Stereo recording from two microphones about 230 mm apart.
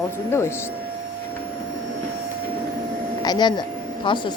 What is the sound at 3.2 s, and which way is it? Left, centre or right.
Speech, centre.